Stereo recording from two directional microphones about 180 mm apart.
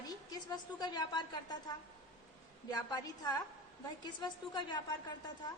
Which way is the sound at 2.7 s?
20° left (ahead or behind).